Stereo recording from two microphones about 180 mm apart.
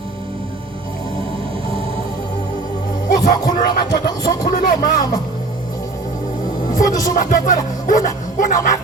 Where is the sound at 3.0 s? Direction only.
45° left (ahead or behind).